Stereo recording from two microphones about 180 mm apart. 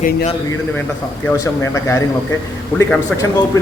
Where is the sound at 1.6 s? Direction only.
15° left (ahead or behind).